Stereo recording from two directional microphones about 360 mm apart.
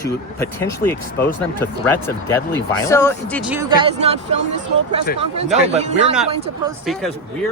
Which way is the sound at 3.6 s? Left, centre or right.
Centre.